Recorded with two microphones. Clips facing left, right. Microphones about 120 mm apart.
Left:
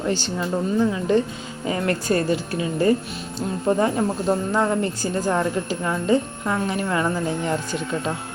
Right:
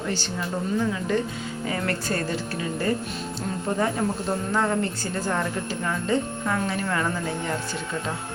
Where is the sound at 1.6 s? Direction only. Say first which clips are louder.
Left 5 dB; 20° left (ahead or behind).